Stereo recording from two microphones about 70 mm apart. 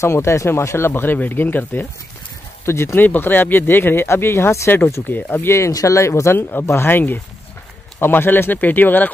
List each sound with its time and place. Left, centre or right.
0.0 s speech: left
2.6 s speech: left
5.7 s speech: left